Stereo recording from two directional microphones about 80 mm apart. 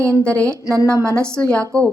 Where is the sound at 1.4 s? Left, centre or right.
Centre.